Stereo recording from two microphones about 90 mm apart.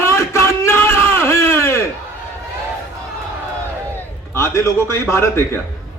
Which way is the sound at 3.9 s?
30° left (ahead or behind).